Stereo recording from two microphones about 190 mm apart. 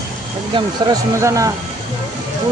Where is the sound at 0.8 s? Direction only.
20° right (ahead or behind).